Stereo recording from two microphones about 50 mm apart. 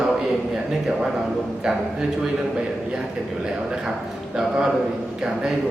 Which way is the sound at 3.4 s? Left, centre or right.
Centre.